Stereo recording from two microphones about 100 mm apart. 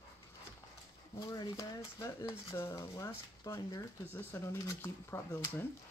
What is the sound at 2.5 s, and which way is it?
Speech, 30° left (ahead or behind).